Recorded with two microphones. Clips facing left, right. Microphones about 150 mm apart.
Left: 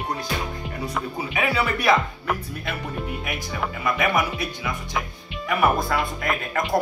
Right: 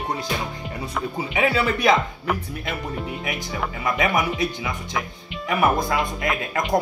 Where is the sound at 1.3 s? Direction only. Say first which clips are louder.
Right 3 dB; 20° right (ahead or behind).